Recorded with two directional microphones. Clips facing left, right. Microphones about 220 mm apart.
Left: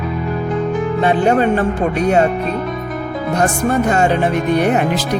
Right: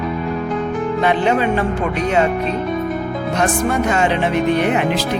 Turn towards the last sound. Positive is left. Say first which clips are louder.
# left 1 dB
turn(degrees=45)  # may be behind; listen again after turning